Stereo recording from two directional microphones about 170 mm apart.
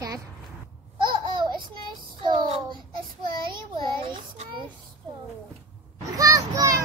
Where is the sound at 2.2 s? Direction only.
25° right (ahead or behind).